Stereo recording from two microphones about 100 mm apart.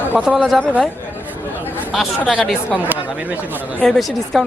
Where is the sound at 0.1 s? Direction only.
10° right (ahead or behind).